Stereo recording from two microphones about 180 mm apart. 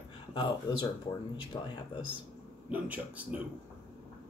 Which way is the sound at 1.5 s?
25° left (ahead or behind).